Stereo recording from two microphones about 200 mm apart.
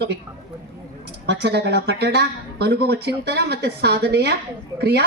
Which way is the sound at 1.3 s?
55° right (ahead or behind).